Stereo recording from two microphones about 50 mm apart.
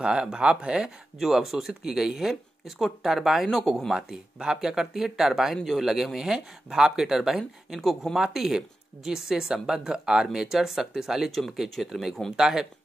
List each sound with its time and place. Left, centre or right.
0.0 s speech: centre
4.1 s speech: centre
8.2 s speech: centre